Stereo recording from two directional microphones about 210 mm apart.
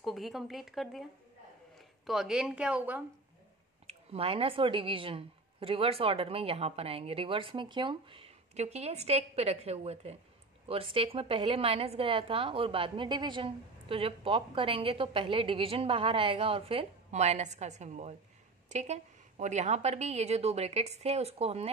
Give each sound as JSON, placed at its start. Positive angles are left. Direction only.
{"t": 0.0, "sound": "speech", "side_deg": 0}
{"t": 3.8, "sound": "a woman's voice", "side_deg": -30}